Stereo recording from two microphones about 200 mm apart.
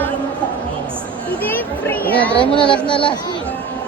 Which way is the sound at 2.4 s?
25° left (ahead or behind).